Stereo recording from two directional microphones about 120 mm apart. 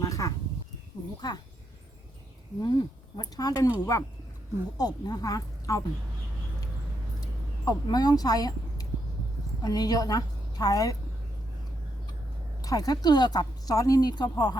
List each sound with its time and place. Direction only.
0.0 s speech: 30° left (ahead or behind)
2.6 s speech: 35° left (ahead or behind)
7.2 s a sound: 30° left (ahead or behind)
9.6 s a woman's voice: 35° left (ahead or behind)
12.6 s speech: 30° left (ahead or behind)